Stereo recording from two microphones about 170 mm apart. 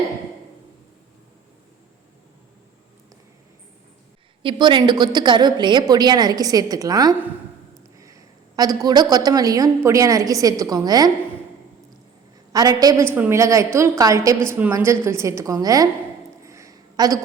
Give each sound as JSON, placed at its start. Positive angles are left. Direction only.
{"t": 4.4, "sound": "a woman's voice", "side_deg": -25}
{"t": 12.5, "sound": "a woman's voice", "side_deg": -20}
{"t": 16.4, "sound": "a sound", "side_deg": -20}